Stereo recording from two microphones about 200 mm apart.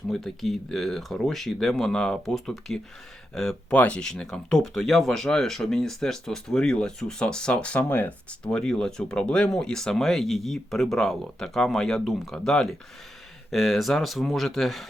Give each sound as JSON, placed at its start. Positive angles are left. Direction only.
{"t": 0.1, "sound": "speech", "side_deg": 0}